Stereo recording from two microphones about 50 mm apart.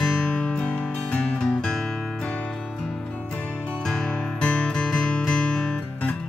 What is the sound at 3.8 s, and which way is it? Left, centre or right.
Music, centre.